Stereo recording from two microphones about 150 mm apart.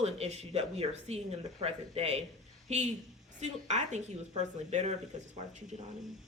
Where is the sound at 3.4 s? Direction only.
50° right (ahead or behind).